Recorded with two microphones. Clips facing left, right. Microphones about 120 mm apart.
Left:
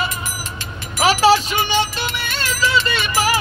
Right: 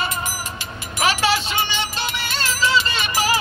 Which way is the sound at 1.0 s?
35° left (ahead or behind).